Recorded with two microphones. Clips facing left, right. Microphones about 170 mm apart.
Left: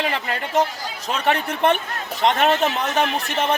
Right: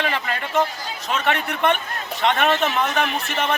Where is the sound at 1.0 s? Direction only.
35° left (ahead or behind).